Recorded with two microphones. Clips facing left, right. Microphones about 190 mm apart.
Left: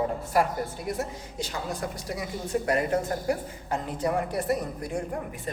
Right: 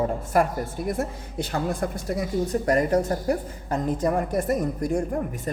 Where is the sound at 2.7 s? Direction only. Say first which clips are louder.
Right 4 dB; 40° right (ahead or behind).